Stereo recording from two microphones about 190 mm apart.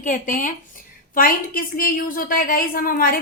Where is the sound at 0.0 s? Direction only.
45° left (ahead or behind).